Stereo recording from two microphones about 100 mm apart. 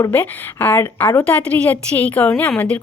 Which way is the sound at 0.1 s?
20° left (ahead or behind).